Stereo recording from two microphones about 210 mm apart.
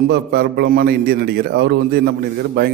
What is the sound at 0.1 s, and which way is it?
A man's voice, 50° right (ahead or behind).